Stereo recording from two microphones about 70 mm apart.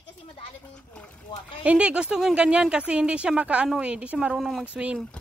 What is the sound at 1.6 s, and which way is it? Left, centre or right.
Speech, centre.